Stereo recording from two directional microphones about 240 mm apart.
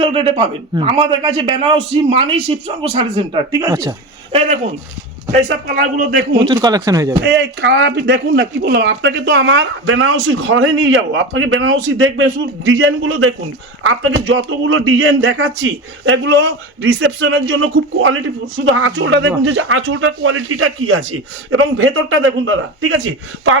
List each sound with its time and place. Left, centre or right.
0.0 s a man's voice: right
6.4 s speech: centre
7.3 s a man's voice: right